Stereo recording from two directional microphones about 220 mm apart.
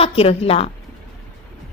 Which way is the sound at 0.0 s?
25° left (ahead or behind).